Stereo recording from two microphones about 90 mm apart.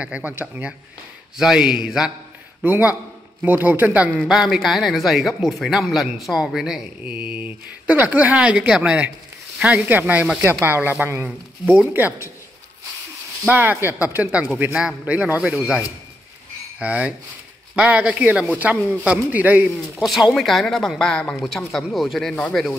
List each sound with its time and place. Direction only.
0.0 s speech: 15° right (ahead or behind)
1.4 s speech: 5° right (ahead or behind)
2.6 s speech: 20° right (ahead or behind)
4.2 s speech: 5° right (ahead or behind)
7.0 s speech: 15° right (ahead or behind)
13.5 s speech: 20° right (ahead or behind)
20.0 s speech: 5° right (ahead or behind)